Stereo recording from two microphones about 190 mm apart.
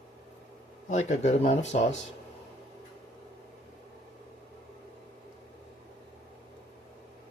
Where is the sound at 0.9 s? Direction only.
35° left (ahead or behind).